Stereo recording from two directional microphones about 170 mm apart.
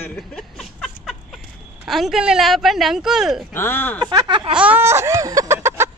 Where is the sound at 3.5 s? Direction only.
15° left (ahead or behind).